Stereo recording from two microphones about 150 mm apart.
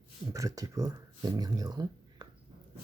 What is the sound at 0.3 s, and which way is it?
Speech, 20° right (ahead or behind).